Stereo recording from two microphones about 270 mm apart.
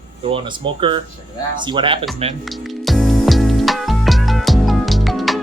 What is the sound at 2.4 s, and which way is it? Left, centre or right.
Music, centre.